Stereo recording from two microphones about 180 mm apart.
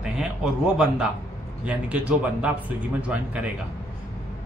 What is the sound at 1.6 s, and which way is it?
Speech, 5° right (ahead or behind).